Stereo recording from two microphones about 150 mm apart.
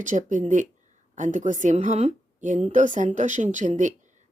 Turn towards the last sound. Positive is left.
turn(degrees=-55)  # may be behind; listen again after turning